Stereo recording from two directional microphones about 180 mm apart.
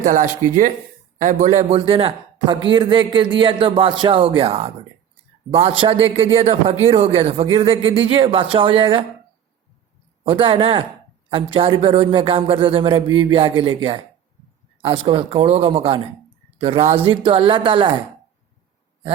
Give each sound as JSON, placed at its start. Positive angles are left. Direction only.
{"t": 0.0, "sound": "a man's voice", "side_deg": -45}
{"t": 10.2, "sound": "a man's voice", "side_deg": -30}